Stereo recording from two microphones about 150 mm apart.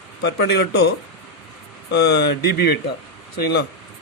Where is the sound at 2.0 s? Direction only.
90° left.